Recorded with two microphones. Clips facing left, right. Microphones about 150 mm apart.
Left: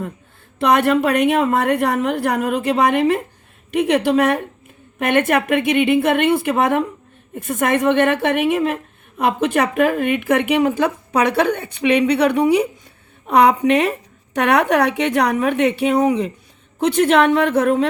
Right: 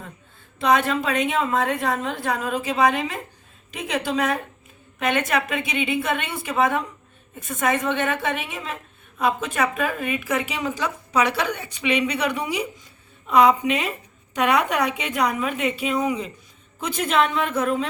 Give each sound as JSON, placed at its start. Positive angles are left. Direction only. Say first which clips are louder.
{"t": 0.6, "sound": "a woman's voice", "louder": "left 5 dB", "side_deg": 65}